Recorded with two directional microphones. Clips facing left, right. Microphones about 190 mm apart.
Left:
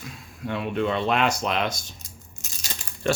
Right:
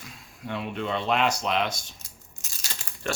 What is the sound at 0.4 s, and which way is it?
Speech, 55° left (ahead or behind).